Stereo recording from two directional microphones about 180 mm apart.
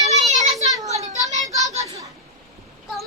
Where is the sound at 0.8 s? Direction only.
40° right (ahead or behind).